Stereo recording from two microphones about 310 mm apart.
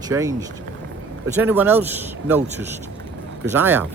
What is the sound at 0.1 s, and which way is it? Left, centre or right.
Speech, centre.